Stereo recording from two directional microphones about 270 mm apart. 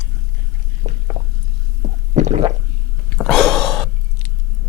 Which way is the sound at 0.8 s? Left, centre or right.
Right.